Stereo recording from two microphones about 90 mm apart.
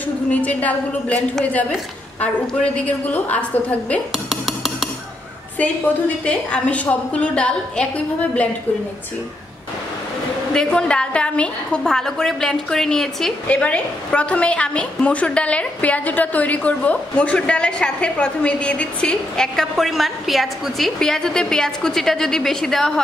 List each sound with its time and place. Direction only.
0.3 s a woman's voice: 15° left (ahead or behind)
4.1 s dishes: centre (ahead or behind)
5.6 s a woman's voice: 15° left (ahead or behind)
10.5 s a woman's voice: 10° left (ahead or behind)